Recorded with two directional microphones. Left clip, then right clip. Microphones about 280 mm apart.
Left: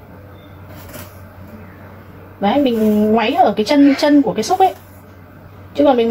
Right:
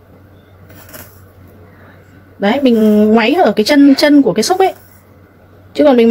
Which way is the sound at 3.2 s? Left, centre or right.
Right.